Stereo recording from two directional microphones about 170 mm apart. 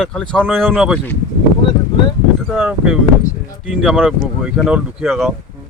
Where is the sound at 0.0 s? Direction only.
5° left (ahead or behind).